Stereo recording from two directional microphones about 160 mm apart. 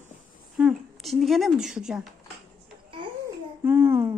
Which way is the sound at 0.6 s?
Centre (ahead or behind).